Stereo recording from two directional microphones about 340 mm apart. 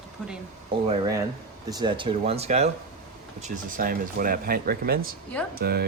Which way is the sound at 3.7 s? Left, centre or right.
Right.